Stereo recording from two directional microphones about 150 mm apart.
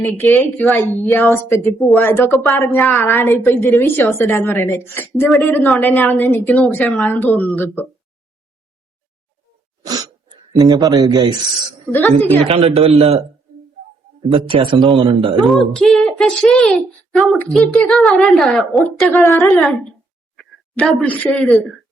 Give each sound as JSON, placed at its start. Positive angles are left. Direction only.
{"t": 0.0, "sound": "a woman's voice", "side_deg": 15}
{"t": 9.8, "sound": "speech", "side_deg": -25}
{"t": 11.9, "sound": "a woman's voice", "side_deg": 10}
{"t": 12.5, "sound": "a man's voice", "side_deg": -40}
{"t": 14.3, "sound": "speech", "side_deg": -35}
{"t": 15.4, "sound": "a woman's voice", "side_deg": 0}
{"t": 19.2, "sound": "a woman's voice", "side_deg": 15}
{"t": 19.5, "sound": "a woman's voice", "side_deg": 0}